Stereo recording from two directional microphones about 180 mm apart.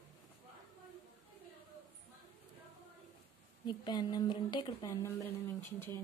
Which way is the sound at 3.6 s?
25° left (ahead or behind).